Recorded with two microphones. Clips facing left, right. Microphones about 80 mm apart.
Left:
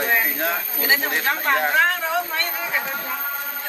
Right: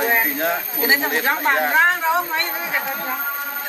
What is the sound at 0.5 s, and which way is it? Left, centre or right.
Speech, right.